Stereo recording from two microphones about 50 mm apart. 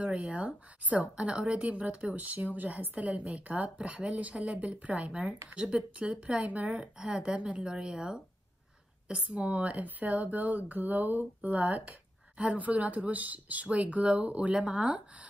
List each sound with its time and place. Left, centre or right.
0.0 s speech: right
2.1 s speech: right